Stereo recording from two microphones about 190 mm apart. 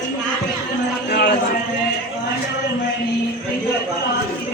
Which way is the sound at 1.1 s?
55° left (ahead or behind).